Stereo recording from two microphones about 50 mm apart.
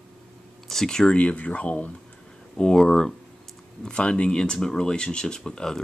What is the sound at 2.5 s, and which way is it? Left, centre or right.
Speech, centre.